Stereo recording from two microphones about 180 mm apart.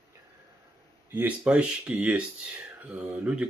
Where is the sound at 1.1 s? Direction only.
5° right (ahead or behind).